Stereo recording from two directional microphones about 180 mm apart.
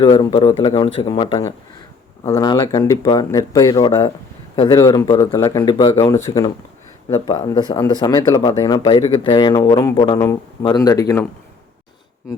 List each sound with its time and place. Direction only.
0.0 s speech: 25° left (ahead or behind)